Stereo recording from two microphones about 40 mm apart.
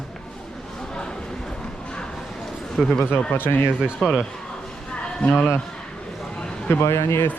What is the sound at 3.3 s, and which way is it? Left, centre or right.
Speech, left.